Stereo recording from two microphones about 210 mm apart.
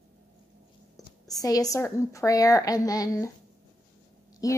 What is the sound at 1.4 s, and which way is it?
Speech, 15° left (ahead or behind).